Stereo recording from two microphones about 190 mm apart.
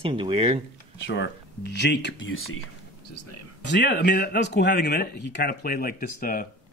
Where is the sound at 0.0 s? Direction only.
30° right (ahead or behind).